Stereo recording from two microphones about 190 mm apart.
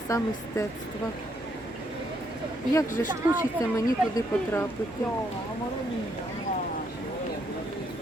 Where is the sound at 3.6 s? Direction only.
20° left (ahead or behind).